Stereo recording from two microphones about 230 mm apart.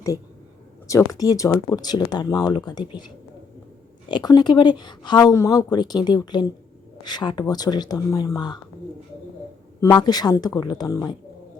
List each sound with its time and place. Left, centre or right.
0.9 s speech: centre
4.1 s speech: centre
9.8 s speech: centre